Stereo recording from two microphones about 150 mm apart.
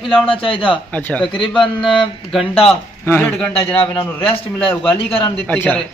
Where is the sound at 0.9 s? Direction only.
10° left (ahead or behind).